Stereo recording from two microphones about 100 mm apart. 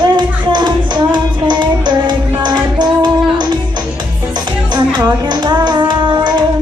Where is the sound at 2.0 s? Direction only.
45° right (ahead or behind).